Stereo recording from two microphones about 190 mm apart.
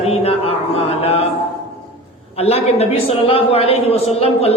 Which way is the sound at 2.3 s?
30° left (ahead or behind).